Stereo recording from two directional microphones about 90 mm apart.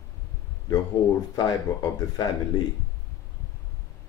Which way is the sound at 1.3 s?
45° left (ahead or behind).